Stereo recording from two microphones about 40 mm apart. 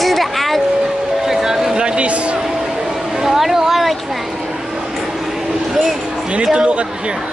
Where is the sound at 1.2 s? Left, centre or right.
Centre; by 2.3 s right.